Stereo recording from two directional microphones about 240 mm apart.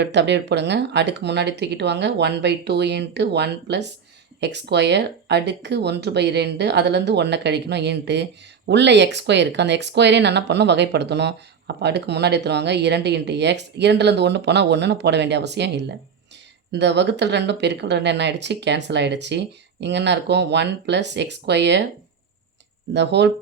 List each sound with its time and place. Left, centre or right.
0.0 s speech: right
22.9 s speech: right